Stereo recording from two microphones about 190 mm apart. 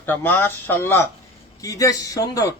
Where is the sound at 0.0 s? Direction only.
10° left (ahead or behind).